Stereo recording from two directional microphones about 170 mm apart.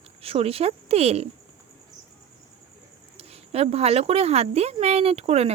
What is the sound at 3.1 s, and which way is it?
Speech, 35° right (ahead or behind).